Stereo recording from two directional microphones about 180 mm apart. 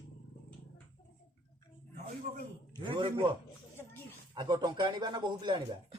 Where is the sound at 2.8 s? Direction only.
25° right (ahead or behind).